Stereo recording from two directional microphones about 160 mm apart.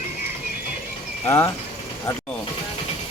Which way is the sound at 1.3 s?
15° left (ahead or behind).